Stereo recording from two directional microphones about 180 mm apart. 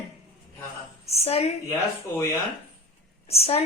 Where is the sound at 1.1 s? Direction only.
35° left (ahead or behind).